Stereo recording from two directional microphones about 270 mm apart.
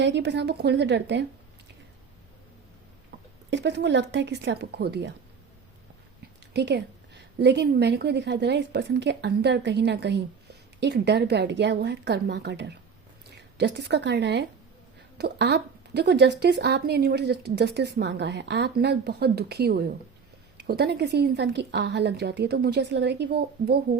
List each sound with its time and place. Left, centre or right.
0.0 s a woman's voice: right
3.5 s a woman's voice: right
6.5 s a woman's voice: right